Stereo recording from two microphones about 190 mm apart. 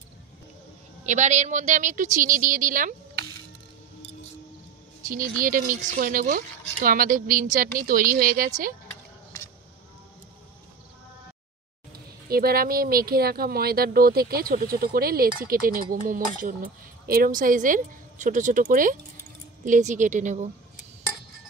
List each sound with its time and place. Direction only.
1.0 s a woman's voice: 40° right (ahead or behind)
5.0 s speech: 45° right (ahead or behind)
12.3 s a woman's voice: 50° right (ahead or behind)